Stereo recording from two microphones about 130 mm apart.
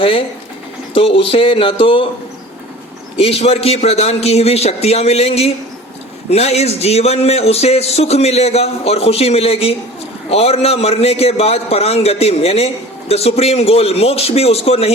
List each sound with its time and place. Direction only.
0.0 s a man's voice: 45° left (ahead or behind)
3.2 s a man's voice: 50° left (ahead or behind)